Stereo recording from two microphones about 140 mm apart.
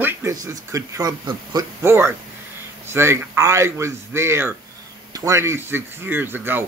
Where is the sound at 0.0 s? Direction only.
20° right (ahead or behind).